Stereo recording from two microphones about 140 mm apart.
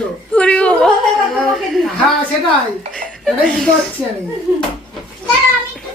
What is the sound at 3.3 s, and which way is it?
Speech, 5° left (ahead or behind).